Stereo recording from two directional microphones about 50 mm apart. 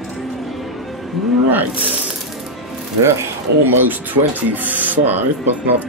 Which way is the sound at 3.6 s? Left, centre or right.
Right.